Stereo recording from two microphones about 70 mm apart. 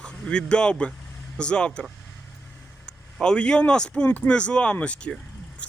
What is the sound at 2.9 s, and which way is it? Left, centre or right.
A man's voice, centre.